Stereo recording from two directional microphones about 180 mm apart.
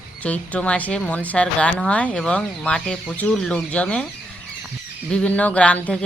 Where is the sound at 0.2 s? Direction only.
5° left (ahead or behind).